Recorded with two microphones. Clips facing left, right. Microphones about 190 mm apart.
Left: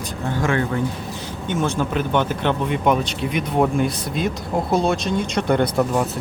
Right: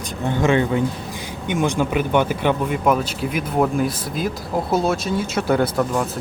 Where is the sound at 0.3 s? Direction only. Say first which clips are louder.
Right 4 dB; 20° right (ahead or behind).